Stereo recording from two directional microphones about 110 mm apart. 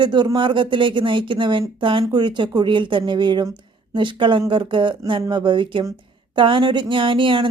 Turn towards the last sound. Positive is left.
turn(degrees=-50)  # may be behind; listen again after turning